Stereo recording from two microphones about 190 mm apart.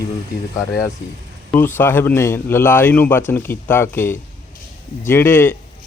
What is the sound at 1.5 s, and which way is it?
Speech, 10° left (ahead or behind).